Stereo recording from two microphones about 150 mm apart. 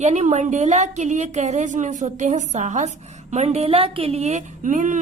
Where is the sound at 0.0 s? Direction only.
50° right (ahead or behind).